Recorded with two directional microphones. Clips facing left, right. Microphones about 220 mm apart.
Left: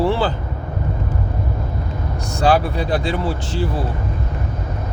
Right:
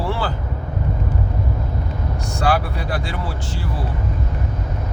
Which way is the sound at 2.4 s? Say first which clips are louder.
Left 4 dB; 20° left (ahead or behind).